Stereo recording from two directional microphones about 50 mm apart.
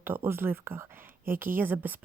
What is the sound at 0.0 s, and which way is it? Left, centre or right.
A woman's voice, right.